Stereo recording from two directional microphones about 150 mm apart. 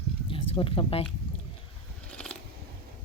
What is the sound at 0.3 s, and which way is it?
Speech, 35° left (ahead or behind).